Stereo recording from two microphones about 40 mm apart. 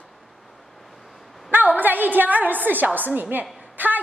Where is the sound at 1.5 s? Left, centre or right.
Right.